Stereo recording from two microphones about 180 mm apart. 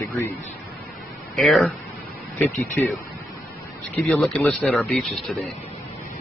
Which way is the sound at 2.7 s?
15° left (ahead or behind).